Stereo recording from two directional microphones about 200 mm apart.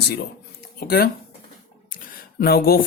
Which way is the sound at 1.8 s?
45° left (ahead or behind).